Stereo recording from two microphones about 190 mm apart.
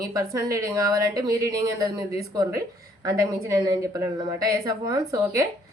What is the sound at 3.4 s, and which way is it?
A woman's voice, 20° right (ahead or behind).